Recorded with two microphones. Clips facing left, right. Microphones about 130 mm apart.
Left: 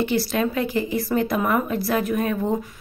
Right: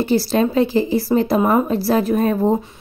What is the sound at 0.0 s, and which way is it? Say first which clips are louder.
A woman's voice: right 5 dB; 35° right (ahead or behind).